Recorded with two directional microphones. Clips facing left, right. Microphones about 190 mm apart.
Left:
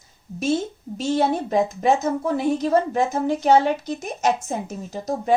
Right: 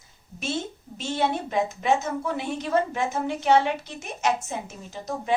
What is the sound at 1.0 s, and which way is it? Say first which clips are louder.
A woman's voice: left 5 dB; 40° left (ahead or behind).